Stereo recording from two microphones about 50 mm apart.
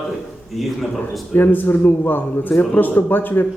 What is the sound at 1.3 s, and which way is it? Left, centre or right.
A man's voice, left.